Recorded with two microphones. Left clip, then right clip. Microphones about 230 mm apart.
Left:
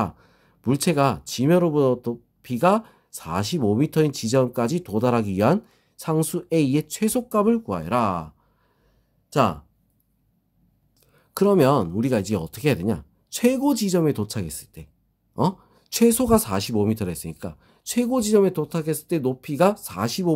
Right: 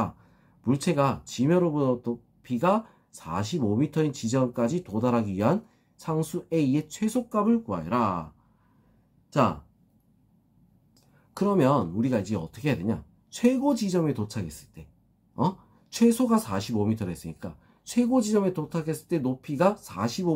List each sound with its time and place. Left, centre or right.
0.0 s speech: left
9.3 s speech: left
11.3 s speech: left